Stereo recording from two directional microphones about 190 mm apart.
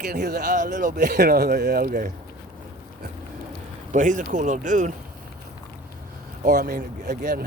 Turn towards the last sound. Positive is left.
turn(degrees=-50)  # may be behind; listen again after turning